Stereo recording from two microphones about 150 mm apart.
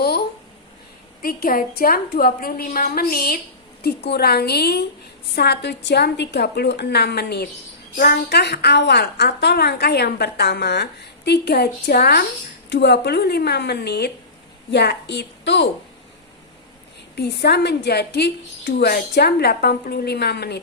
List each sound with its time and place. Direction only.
0.0 s a sound: 90° left
1.2 s a woman's voice: 75° left (ahead or behind); by 15.3 s 90° left
17.2 s a woman's voice: 90° left